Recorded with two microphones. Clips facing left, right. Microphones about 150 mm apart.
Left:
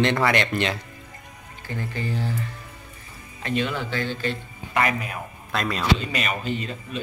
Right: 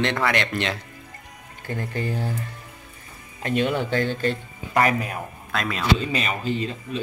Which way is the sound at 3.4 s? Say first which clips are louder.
Right 3 dB; 50° right (ahead or behind).